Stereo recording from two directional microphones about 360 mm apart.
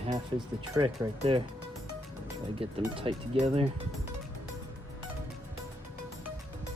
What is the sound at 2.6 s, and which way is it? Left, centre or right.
Speech, centre.